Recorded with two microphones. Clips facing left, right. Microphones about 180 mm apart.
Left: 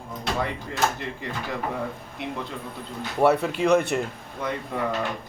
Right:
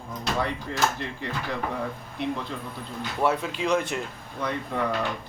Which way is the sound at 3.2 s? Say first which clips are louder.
Left 5 dB; 60° left (ahead or behind).